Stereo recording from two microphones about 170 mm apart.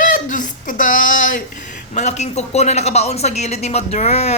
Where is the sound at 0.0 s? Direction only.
50° left (ahead or behind).